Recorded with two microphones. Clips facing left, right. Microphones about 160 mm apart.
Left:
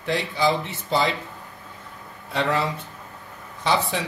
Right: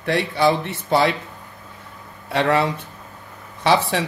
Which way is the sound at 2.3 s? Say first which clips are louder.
Right 5 dB; 70° right (ahead or behind).